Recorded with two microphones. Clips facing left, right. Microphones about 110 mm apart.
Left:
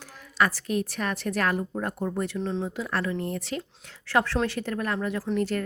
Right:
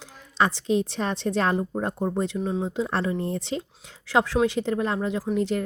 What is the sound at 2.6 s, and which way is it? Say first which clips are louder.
Speech: right 3 dB; 25° right (ahead or behind).